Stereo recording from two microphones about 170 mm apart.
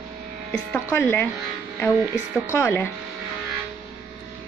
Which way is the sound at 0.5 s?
10° left (ahead or behind).